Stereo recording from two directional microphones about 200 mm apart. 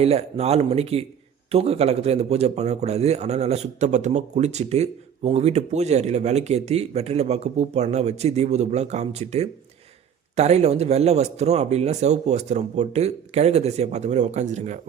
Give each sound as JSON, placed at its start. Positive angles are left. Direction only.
{"t": 0.0, "sound": "a man's voice", "side_deg": -30}